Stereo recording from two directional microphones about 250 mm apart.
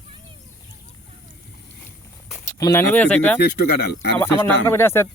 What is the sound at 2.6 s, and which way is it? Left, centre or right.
Speech, centre.